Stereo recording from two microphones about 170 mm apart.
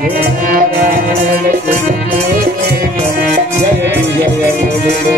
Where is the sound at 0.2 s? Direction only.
55° right (ahead or behind).